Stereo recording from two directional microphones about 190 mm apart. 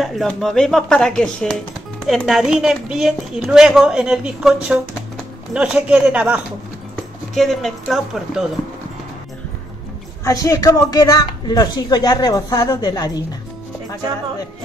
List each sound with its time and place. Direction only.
0.0 s a woman's voice: centre (ahead or behind)
10.2 s speech: 15° left (ahead or behind)